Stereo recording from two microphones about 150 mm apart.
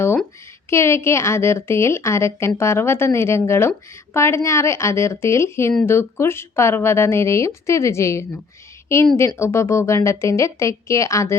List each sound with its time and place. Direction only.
0.7 s a woman's voice: 20° left (ahead or behind)